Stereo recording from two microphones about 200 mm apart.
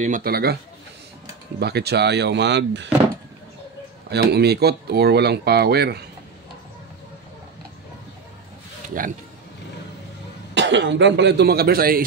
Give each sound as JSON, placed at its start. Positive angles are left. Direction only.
{"t": 0.0, "sound": "speech", "side_deg": -45}
{"t": 1.6, "sound": "speech", "side_deg": -55}
{"t": 4.1, "sound": "speech", "side_deg": -55}
{"t": 10.5, "sound": "speech", "side_deg": -60}